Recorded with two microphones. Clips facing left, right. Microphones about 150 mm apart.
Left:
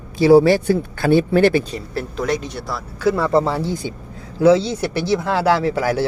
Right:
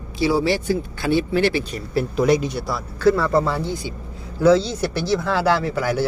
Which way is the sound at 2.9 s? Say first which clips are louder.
Left 1 dB; 15° left (ahead or behind).